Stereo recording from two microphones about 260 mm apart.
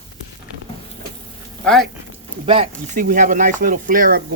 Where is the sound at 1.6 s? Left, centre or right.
Centre.